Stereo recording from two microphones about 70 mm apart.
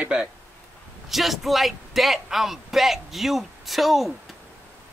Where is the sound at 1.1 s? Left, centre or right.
Centre.